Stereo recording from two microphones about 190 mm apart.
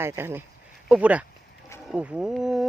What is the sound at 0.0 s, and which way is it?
Speech, 10° right (ahead or behind).